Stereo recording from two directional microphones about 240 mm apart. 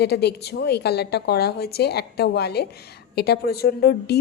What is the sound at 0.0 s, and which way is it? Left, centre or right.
A woman's voice, left.